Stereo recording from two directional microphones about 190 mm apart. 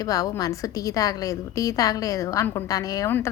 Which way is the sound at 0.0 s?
20° left (ahead or behind).